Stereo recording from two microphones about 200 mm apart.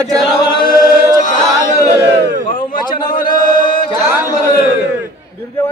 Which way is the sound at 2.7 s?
45° left (ahead or behind).